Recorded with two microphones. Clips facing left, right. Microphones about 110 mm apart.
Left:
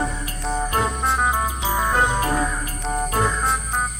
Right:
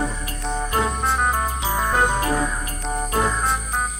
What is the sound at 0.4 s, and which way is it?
Music, centre (ahead or behind).